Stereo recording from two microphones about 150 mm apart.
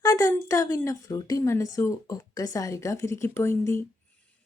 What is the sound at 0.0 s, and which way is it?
A woman's voice, 20° left (ahead or behind).